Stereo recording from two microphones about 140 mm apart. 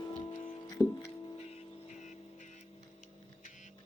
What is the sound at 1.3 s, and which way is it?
Music, 50° left (ahead or behind).